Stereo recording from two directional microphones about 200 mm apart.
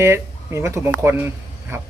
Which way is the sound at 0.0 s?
15° right (ahead or behind).